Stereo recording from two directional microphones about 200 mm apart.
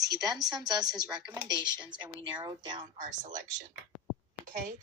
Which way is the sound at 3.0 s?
40° right (ahead or behind).